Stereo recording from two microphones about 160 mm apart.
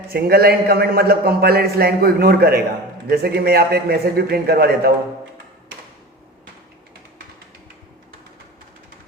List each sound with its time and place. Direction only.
0.1 s a man's voice: 75° right (ahead or behind)